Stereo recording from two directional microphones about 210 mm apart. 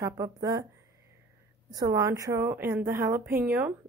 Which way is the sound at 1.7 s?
15° right (ahead or behind).